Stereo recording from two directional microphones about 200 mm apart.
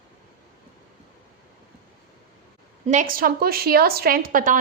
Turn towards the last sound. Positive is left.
turn(degrees=-40)  # may be behind; listen again after turning